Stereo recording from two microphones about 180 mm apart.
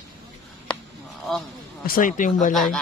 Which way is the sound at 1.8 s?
50° left (ahead or behind).